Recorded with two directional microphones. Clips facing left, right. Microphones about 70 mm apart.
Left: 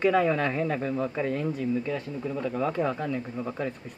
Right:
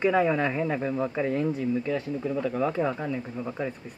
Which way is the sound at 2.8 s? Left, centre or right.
Centre.